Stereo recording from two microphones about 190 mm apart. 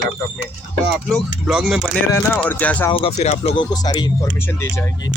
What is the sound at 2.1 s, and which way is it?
Speech, 10° left (ahead or behind).